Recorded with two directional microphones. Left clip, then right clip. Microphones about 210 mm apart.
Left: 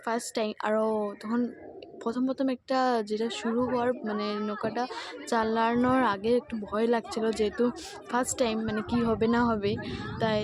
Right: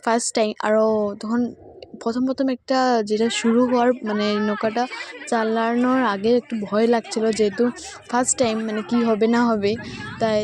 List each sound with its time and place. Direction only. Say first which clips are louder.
0.0 s speech: right 10 dB; 35° right (ahead or behind)
5.7 s speech: right 5 dB; 15° right (ahead or behind)
6.0 s speech: right 6 dB; 30° right (ahead or behind)